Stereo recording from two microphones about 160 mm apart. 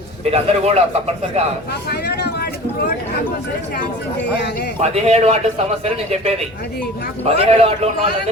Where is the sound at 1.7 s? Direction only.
90° left.